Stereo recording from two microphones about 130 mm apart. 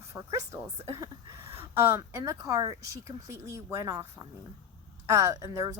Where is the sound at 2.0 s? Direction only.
25° right (ahead or behind).